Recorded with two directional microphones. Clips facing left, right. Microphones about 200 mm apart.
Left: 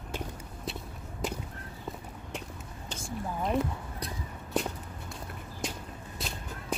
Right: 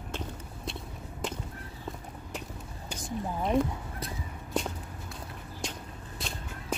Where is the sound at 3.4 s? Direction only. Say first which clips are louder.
Right 2 dB; centre (ahead or behind).